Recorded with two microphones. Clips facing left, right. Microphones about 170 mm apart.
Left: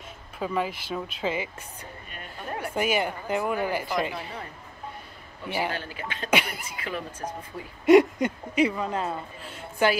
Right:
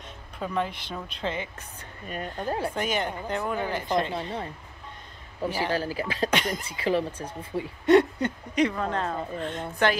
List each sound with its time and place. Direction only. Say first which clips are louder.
0.4 s speech: left 1 dB; 5° left (ahead or behind)
2.0 s speech: right 8 dB; 35° right (ahead or behind)
2.7 s speech: left 2 dB; 10° left (ahead or behind)
4.1 s speech: right 5 dB; 30° right (ahead or behind)
5.7 s speech: right 6 dB; 35° right (ahead or behind)
6.3 s speech: left 5 dB; 10° left (ahead or behind)
6.6 s speech: right 8 dB; 30° right (ahead or behind)
7.8 s speech: left 3 dB; 10° left (ahead or behind)